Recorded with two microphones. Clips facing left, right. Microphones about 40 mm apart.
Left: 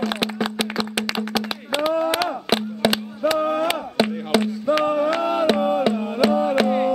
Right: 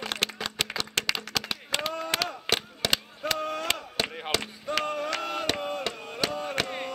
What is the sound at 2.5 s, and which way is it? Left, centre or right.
Chop, centre.